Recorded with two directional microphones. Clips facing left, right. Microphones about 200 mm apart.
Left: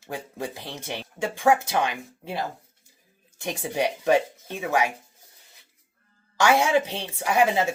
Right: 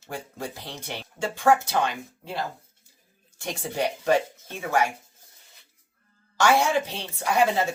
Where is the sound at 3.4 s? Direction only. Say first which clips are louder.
Left 2 dB; 15° left (ahead or behind).